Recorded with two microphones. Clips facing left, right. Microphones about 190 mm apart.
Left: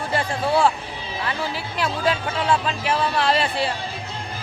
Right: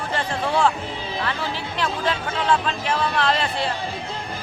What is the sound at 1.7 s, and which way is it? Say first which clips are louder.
Speech: left 2 dB; 10° left (ahead or behind).